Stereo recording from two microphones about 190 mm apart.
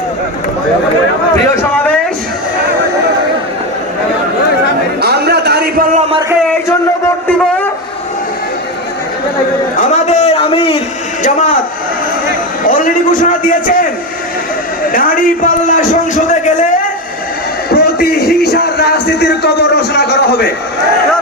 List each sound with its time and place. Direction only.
4.9 s a sound: 60° right (ahead or behind)
9.7 s a man's voice: 35° left (ahead or behind)
11.2 s speech: 40° left (ahead or behind)
12.6 s a man's voice: 45° left (ahead or behind)
14.9 s a man's voice: 45° left (ahead or behind)
17.7 s speech: 55° left (ahead or behind)